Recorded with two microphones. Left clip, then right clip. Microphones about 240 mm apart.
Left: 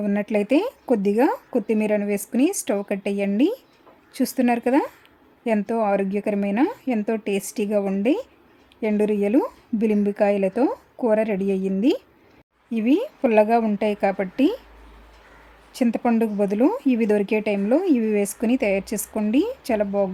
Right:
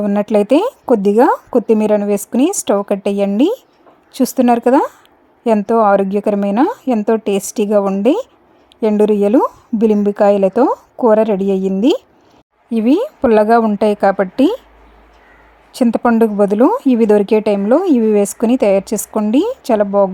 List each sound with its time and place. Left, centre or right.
0.0 s speech: right
15.7 s speech: right